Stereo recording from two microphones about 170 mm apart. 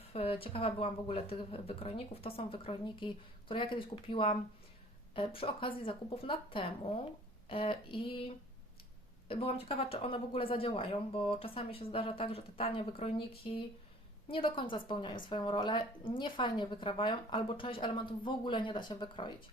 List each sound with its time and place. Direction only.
0.1 s speech: 35° left (ahead or behind)
9.3 s speech: 35° left (ahead or behind)
14.3 s speech: 30° left (ahead or behind)